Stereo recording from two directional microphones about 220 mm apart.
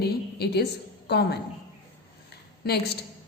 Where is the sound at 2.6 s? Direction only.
45° left (ahead or behind).